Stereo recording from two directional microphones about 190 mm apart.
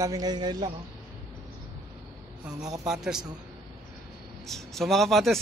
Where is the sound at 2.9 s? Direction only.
5° right (ahead or behind).